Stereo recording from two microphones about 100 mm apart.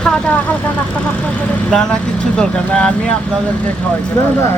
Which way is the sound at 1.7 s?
10° left (ahead or behind).